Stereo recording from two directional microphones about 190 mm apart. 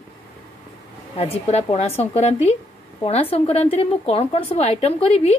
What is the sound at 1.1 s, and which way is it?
A woman's voice, 30° left (ahead or behind).